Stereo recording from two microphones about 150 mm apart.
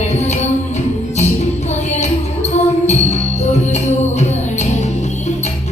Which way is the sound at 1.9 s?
50° left (ahead or behind).